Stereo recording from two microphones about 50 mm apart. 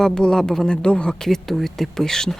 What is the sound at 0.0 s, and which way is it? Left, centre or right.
Speech, centre.